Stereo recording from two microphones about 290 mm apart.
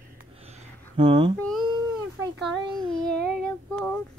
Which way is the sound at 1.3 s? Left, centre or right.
Centre.